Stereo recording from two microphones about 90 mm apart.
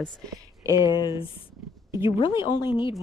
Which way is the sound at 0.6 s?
40° right (ahead or behind).